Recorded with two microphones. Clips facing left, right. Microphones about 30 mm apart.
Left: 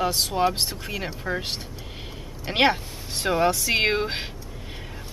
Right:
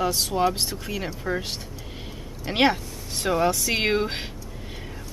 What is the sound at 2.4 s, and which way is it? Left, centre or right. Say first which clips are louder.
Speech: even; centre.